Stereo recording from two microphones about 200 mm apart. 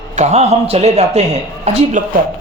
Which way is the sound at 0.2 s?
35° right (ahead or behind).